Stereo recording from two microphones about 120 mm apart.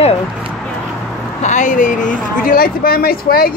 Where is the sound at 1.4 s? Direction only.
90° left.